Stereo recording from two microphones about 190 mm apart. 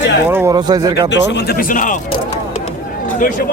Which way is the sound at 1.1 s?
65° left (ahead or behind).